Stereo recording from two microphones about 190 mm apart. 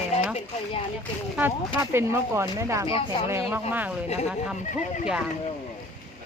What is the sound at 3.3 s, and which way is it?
Speech, 15° right (ahead or behind).